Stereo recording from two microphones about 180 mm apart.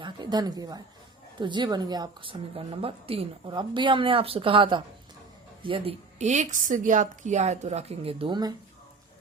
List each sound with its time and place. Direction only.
0.0 s a woman's voice: 25° right (ahead or behind)